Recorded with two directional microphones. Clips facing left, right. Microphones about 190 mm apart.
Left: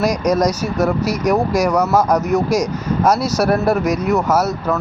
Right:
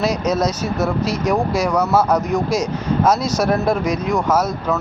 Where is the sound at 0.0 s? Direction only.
10° left (ahead or behind).